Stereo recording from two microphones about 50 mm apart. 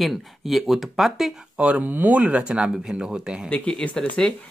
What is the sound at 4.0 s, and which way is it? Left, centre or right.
Speech, centre.